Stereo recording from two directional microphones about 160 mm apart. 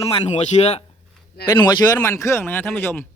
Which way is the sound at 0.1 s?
40° left (ahead or behind).